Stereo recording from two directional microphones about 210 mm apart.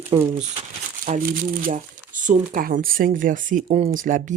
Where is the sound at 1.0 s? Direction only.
40° right (ahead or behind).